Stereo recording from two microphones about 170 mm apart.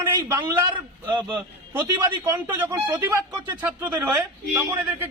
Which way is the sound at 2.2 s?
15° right (ahead or behind).